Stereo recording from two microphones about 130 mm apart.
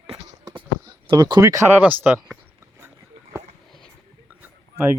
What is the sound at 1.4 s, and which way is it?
Speech, 25° right (ahead or behind).